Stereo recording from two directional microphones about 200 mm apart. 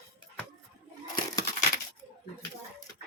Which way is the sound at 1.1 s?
20° left (ahead or behind).